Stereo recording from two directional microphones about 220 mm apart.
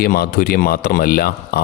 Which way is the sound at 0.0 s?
45° left (ahead or behind).